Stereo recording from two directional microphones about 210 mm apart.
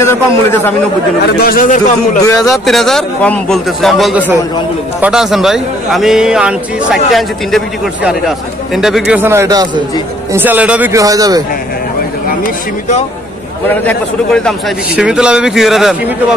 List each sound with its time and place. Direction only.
0.0 s a man's voice: 10° left (ahead or behind)
1.2 s speech: 45° left (ahead or behind)
2.2 s a man's voice: 15° left (ahead or behind)
2.6 s a man's voice: centre (ahead or behind); by 11.4 s 15° right (ahead or behind)
13.7 s a man's voice: 5° left (ahead or behind)